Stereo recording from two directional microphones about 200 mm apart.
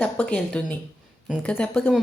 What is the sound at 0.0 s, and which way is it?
A woman's voice, 5° left (ahead or behind).